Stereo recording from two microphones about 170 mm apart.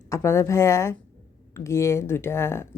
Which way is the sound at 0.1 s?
15° left (ahead or behind).